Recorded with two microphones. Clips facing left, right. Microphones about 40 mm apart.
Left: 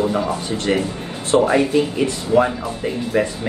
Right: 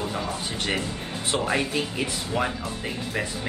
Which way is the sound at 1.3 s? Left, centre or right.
Centre.